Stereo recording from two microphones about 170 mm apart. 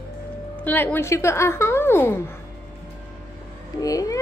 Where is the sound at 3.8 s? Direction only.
20° left (ahead or behind).